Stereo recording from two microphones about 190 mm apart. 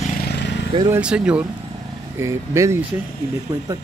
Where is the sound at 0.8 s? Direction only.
10° right (ahead or behind).